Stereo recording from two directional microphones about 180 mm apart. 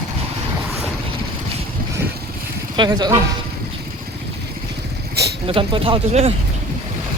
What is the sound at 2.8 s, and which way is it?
Speech, 25° right (ahead or behind).